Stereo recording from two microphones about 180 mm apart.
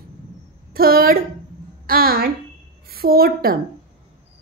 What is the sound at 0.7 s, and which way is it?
A woman's voice, 55° right (ahead or behind).